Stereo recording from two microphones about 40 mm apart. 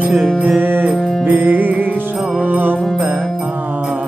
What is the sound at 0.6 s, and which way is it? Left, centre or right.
Music, right.